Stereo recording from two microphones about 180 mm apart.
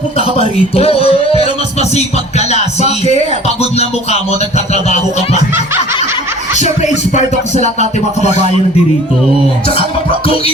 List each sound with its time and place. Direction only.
0.3 s speech: 35° left (ahead or behind)
3.6 s speech: 35° left (ahead or behind)
6.6 s speech: 40° left (ahead or behind)
9.7 s speech: 30° left (ahead or behind)